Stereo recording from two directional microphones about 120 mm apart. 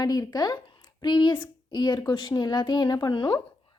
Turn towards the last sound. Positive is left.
turn(degrees=40)  # may be behind; listen again after turning